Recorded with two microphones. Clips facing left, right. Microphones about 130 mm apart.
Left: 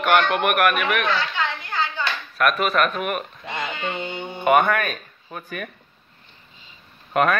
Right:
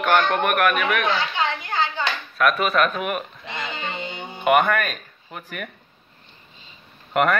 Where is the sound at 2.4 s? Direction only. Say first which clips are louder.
Right 1 dB; centre (ahead or behind).